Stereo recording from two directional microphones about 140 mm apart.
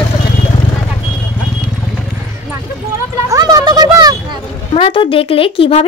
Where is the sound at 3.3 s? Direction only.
25° right (ahead or behind).